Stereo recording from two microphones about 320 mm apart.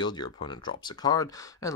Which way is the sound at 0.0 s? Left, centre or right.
Centre.